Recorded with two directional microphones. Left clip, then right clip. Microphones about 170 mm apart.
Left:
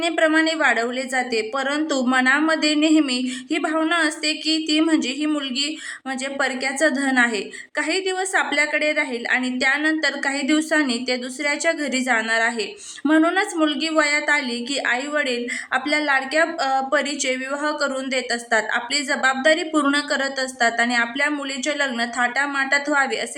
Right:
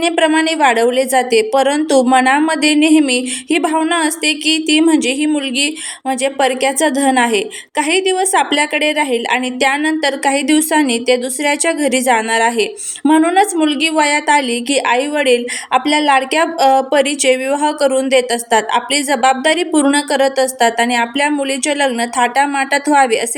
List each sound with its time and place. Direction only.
0.0 s a woman's voice: 25° right (ahead or behind)